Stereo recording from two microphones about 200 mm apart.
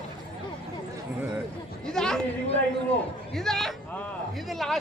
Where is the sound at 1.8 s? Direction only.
5° left (ahead or behind).